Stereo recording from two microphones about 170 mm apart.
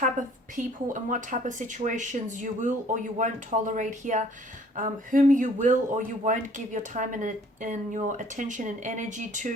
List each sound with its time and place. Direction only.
0.5 s speech: 50° right (ahead or behind)